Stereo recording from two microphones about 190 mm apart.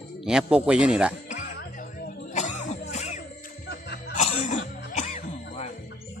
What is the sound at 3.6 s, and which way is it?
Music, 60° left (ahead or behind).